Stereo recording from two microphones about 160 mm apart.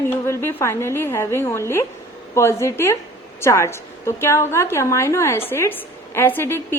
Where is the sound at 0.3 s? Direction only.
15° left (ahead or behind).